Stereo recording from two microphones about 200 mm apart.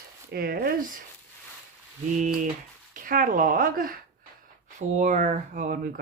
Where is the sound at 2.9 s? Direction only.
40° right (ahead or behind).